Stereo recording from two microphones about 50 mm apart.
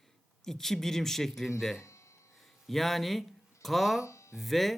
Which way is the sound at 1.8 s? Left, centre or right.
Left.